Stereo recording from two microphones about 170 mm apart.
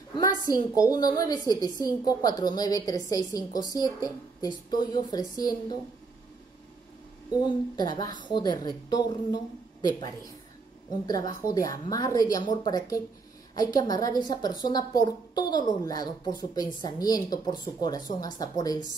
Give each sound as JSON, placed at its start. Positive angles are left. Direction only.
{"t": 0.1, "sound": "a woman's voice", "side_deg": 20}
{"t": 7.3, "sound": "a woman's voice", "side_deg": 25}